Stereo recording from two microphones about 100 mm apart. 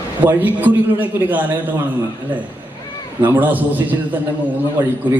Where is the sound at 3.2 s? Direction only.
15° right (ahead or behind).